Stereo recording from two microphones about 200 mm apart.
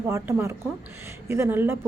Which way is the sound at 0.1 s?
10° right (ahead or behind).